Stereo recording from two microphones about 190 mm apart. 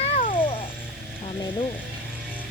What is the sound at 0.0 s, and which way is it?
Music, 35° left (ahead or behind).